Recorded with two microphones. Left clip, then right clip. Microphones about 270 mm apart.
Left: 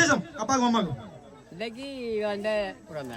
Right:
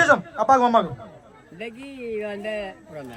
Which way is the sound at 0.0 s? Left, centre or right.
Centre.